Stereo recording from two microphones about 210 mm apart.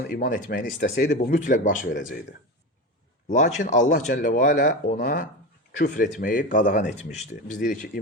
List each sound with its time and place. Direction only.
0.1 s speech: 40° left (ahead or behind)
0.5 s speech: 55° left (ahead or behind)
0.9 s speech: 35° left (ahead or behind)
1.8 s speech: 60° left (ahead or behind)
3.2 s speech: 35° left (ahead or behind)